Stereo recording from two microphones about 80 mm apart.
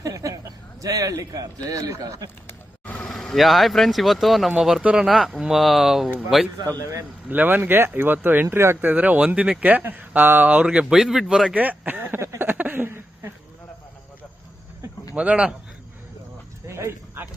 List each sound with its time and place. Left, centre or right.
0.0 s a man's voice: right
2.8 s vehicle: centre
3.1 s speech: centre
6.7 s a man's voice: right
7.3 s speech: right
11.5 s a sound: right
15.1 s speech: centre
16.6 s a sound: right